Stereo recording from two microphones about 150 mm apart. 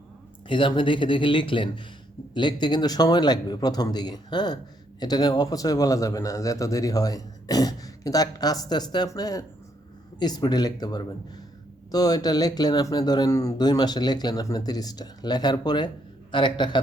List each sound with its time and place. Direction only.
0.4 s a man's voice: 35° left (ahead or behind)